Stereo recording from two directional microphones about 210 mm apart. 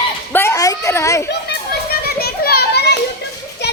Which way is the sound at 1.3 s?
50° left (ahead or behind).